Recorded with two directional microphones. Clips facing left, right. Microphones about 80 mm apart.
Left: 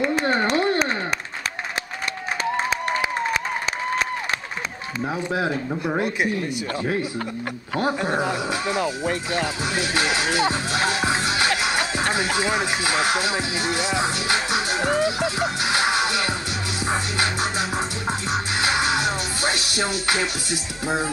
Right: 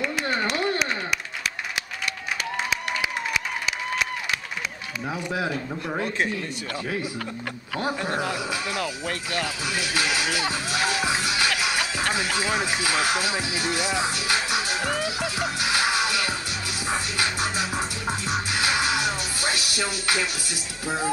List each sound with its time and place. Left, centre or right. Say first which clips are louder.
0.0 s a sound: left 5 dB; left
2.5 s applause: left 4 dB; left
5.3 s speech: left 3 dB; left
5.7 s speech: left 4 dB; centre
6.9 s a man's voice: left 4 dB; left
16.8 s music: left 3 dB; left
20.8 s speech: left 2 dB; left